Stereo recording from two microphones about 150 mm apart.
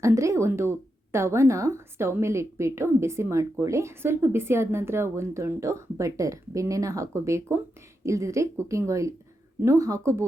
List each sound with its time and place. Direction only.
0.0 s speech: 20° right (ahead or behind)